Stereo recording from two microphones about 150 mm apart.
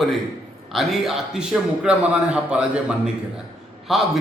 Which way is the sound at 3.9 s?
Centre (ahead or behind).